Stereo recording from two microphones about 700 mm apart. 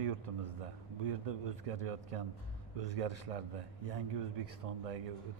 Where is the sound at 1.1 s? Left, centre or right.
Right.